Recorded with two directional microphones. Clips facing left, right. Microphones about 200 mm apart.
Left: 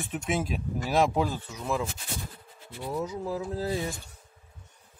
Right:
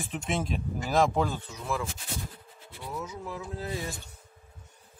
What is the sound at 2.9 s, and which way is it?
Speech, 35° left (ahead or behind).